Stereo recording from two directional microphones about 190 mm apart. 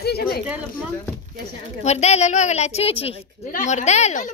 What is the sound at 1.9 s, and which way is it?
Speech, 35° left (ahead or behind).